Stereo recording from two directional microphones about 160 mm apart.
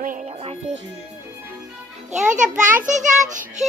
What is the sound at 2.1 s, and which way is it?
A child's voice, 50° right (ahead or behind).